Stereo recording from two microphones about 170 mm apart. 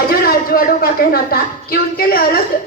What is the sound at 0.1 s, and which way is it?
A woman's voice, 65° left (ahead or behind).